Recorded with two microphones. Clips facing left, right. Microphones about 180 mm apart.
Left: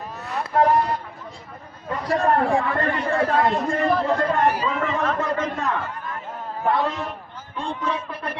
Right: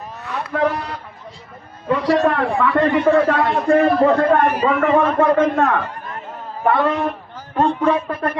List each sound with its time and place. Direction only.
0.5 s vehicle: 75° right (ahead or behind)
1.9 s a man's voice: 85° right; by 8.4 s 50° right (ahead or behind)